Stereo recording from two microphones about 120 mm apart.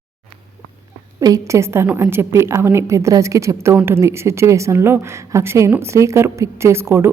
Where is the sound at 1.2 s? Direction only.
30° right (ahead or behind).